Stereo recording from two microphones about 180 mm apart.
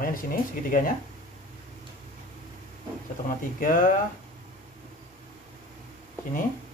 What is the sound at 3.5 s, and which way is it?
Speech, 50° left (ahead or behind).